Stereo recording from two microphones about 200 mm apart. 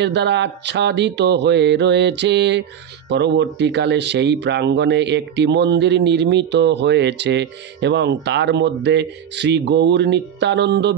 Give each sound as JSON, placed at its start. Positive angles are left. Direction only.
{"t": 0.0, "sound": "speech", "side_deg": -60}